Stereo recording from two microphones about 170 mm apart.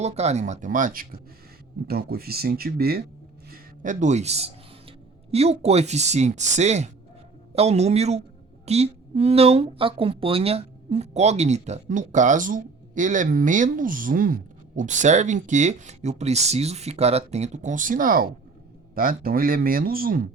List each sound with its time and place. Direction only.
0.0 s speech: 40° right (ahead or behind)
1.9 s speech: 65° right (ahead or behind)
3.5 s a man's voice: 45° right (ahead or behind)